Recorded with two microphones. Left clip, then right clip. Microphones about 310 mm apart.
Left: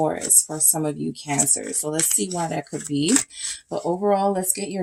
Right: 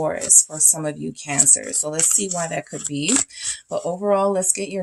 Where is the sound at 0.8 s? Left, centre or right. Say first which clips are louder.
Even; right.